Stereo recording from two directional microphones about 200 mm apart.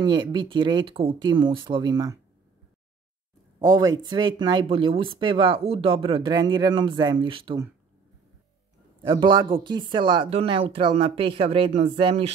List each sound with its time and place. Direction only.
0.0 s speech: 20° right (ahead or behind)
3.5 s speech: 20° right (ahead or behind)
9.0 s speech: 25° right (ahead or behind)